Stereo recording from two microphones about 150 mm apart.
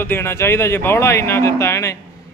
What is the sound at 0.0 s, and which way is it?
A man's voice, 15° left (ahead or behind).